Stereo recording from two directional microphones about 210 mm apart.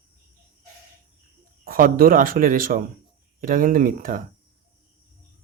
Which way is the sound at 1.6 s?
45° right (ahead or behind).